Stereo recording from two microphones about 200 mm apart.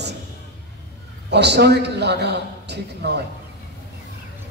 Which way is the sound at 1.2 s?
55° right (ahead or behind).